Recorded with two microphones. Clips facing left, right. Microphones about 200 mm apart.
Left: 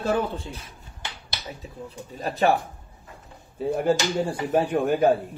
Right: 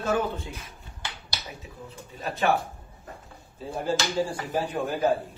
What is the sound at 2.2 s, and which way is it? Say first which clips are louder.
Speech: left 3 dB; 35° left (ahead or behind).